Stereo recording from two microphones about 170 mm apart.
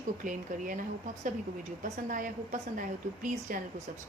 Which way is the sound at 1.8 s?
45° right (ahead or behind).